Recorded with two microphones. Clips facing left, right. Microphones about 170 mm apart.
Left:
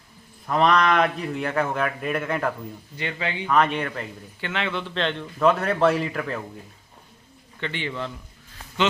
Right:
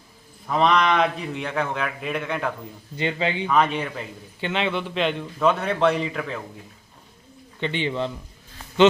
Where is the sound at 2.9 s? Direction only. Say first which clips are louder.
Right 5 dB; 25° right (ahead or behind).